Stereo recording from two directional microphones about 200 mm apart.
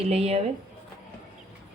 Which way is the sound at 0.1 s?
30° right (ahead or behind).